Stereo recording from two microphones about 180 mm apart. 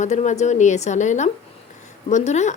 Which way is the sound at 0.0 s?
40° left (ahead or behind).